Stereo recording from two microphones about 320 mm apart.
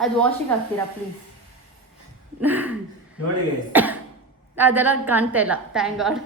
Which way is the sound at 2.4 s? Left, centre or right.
Centre.